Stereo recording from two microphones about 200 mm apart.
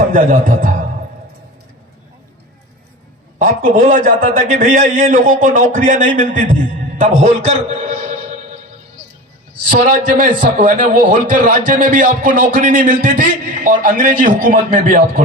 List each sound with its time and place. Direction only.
0.1 s a man's voice: 40° right (ahead or behind)
3.3 s a man's voice: 40° right (ahead or behind)
9.6 s a man's voice: 40° right (ahead or behind)